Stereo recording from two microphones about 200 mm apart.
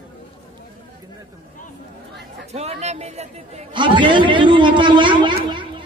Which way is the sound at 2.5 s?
35° right (ahead or behind).